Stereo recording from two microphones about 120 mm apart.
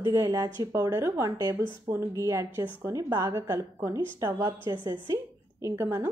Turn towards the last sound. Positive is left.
turn(degrees=-25)  # may be behind; listen again after turning